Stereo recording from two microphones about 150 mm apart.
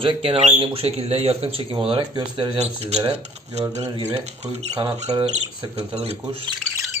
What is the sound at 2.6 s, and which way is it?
Speech, 45° right (ahead or behind).